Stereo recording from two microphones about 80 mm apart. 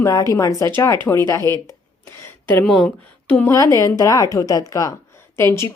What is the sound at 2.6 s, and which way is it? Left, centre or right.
Speech, centre.